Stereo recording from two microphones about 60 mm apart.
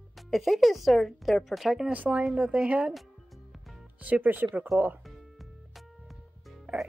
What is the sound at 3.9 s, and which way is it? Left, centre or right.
Speech, right.